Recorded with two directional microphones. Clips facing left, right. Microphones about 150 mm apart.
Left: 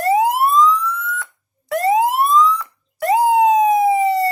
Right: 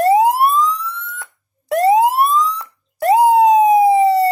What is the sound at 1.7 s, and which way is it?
Police car, 35° right (ahead or behind).